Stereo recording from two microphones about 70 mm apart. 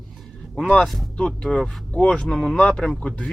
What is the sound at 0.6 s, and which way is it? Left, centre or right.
Speech, centre.